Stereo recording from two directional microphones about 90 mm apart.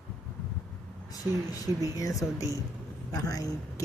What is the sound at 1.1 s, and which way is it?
Speech, 40° left (ahead or behind).